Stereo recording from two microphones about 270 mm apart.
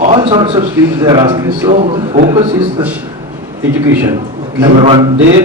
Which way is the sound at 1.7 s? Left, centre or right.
Right.